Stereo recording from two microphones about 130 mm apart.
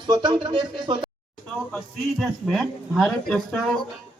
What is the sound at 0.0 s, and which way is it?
Speech, 35° right (ahead or behind).